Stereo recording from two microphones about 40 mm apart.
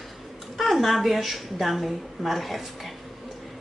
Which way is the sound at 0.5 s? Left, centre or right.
Centre.